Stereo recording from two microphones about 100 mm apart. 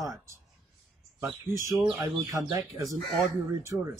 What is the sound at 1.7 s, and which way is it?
Speech, 5° right (ahead or behind).